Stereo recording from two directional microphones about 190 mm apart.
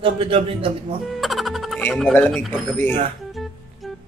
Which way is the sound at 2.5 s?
10° left (ahead or behind).